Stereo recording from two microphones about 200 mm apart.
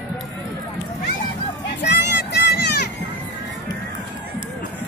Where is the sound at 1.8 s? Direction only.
60° left (ahead or behind).